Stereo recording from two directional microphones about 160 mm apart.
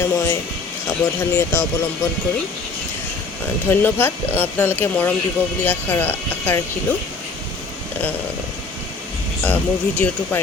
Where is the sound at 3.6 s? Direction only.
15° left (ahead or behind).